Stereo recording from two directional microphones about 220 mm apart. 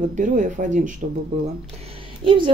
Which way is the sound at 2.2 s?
20° right (ahead or behind).